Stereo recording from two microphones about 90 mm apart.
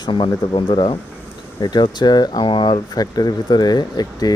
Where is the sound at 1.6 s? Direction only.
55° left (ahead or behind).